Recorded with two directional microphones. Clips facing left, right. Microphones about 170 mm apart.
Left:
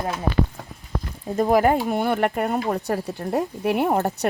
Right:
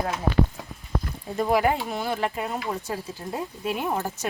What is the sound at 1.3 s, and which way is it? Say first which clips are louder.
Speech: left 4 dB; 45° left (ahead or behind).